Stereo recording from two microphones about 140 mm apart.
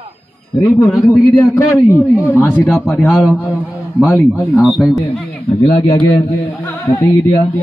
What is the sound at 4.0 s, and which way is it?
Speech, 15° left (ahead or behind).